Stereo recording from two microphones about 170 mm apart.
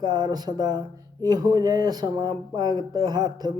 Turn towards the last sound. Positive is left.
turn(degrees=-25)  # may be behind; listen again after turning